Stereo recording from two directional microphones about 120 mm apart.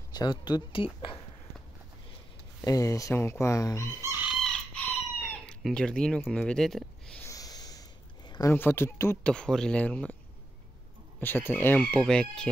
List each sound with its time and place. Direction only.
0.1 s speech: 35° left (ahead or behind)
2.6 s speech: 30° left (ahead or behind)
4.0 s chicken: 20° right (ahead or behind)
4.3 s chicken: centre (ahead or behind)
4.7 s chicken: 10° left (ahead or behind)
5.6 s speech: 5° left (ahead or behind)
7.2 s snort: 30° left (ahead or behind)
8.5 s speech: 20° left (ahead or behind)
9.2 s speech: 5° left (ahead or behind)
11.1 s speech: 15° left (ahead or behind)